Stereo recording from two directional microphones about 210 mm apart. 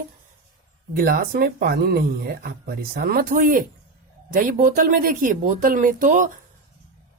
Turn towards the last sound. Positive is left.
turn(degrees=-40)  # may be behind; listen again after turning